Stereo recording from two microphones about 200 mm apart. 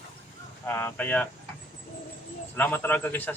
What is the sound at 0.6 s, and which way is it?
Speech, 10° left (ahead or behind).